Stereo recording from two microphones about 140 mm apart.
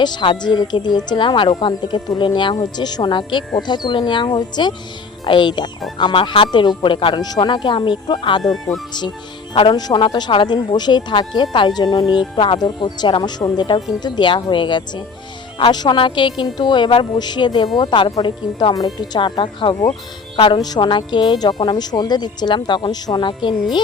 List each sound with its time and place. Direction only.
0.0 s speech: 30° left (ahead or behind)
8.4 s speech: centre (ahead or behind)
8.9 s speech: 30° left (ahead or behind)
12.0 s speech: centre (ahead or behind)
12.4 s speech: 35° left (ahead or behind)